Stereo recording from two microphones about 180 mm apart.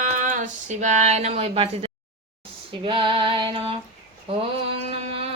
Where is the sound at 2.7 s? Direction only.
25° right (ahead or behind).